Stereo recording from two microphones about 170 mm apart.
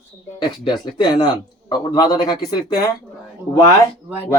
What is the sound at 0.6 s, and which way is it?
Speech, 25° left (ahead or behind).